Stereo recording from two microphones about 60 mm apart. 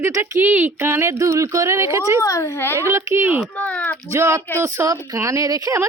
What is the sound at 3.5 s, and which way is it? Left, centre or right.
Speech, left.